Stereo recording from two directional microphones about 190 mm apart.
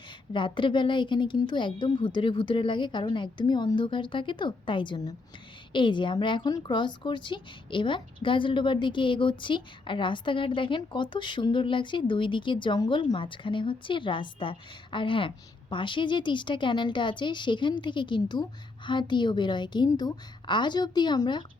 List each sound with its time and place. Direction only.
0.3 s a woman's voice: 25° left (ahead or behind)